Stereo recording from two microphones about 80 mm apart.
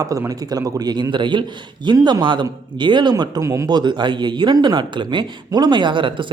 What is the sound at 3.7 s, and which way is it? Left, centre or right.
Speech, right.